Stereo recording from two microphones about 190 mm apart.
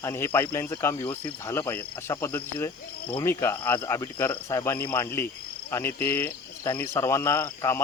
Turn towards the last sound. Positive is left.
turn(degrees=15)  # may be behind; listen again after turning